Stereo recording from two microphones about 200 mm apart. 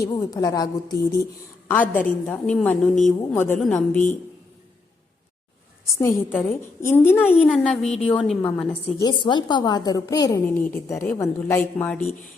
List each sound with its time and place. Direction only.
0.0 s a woman's voice: 15° left (ahead or behind)
5.8 s a woman's voice: 15° left (ahead or behind)
9.0 s a woman's voice: 20° left (ahead or behind)